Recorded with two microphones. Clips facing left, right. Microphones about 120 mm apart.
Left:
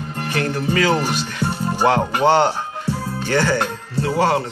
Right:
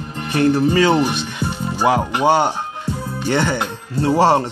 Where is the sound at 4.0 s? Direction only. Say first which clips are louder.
Right 4 dB; 30° right (ahead or behind).